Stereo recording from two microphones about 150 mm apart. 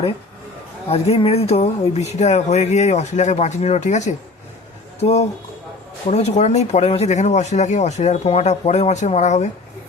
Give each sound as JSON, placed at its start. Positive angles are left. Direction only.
{"t": 0.9, "sound": "speech", "side_deg": 45}